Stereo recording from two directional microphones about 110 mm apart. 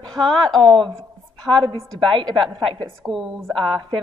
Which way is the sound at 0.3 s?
5° left (ahead or behind).